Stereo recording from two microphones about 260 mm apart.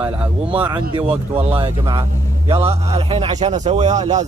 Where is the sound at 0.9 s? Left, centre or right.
Right.